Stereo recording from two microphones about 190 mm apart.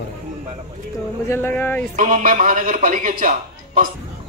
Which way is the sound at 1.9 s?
45° right (ahead or behind).